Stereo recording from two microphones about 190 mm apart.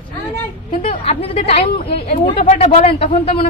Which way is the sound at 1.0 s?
30° left (ahead or behind).